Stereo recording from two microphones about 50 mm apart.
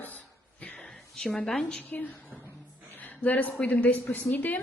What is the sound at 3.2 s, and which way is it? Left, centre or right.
A woman's voice, left.